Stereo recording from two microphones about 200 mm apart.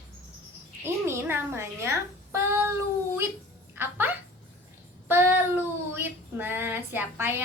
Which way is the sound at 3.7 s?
10° right (ahead or behind).